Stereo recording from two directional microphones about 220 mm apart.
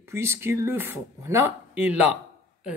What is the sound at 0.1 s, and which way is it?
A woman's voice, 10° right (ahead or behind).